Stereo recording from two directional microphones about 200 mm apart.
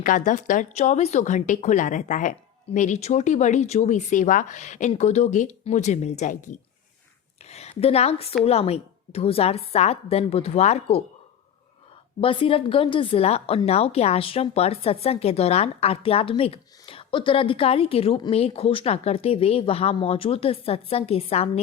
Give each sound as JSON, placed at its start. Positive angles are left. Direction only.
{"t": 0.0, "sound": "a woman's voice", "side_deg": 40}
{"t": 12.2, "sound": "speech", "side_deg": 25}